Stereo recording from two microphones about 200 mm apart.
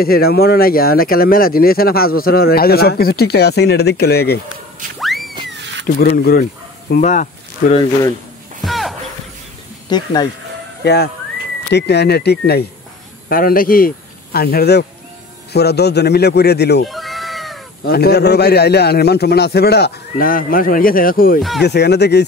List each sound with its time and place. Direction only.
0.0 s speech: 50° left (ahead or behind)
4.9 s music: centre (ahead or behind)
5.5 s a sound: 60° right (ahead or behind)
5.9 s speech: 45° left (ahead or behind)
7.7 s speech: 20° left (ahead or behind)
8.6 s music: centre (ahead or behind)
9.8 s speech: 20° left (ahead or behind)
10.8 s speech: 55° left (ahead or behind)
16.8 s cat: centre (ahead or behind)
17.8 s speech: 50° left (ahead or behind)
21.4 s speech: centre (ahead or behind)
21.6 s speech: 55° left (ahead or behind)